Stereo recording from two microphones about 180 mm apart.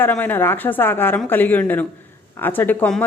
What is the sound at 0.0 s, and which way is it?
Speech, 10° left (ahead or behind).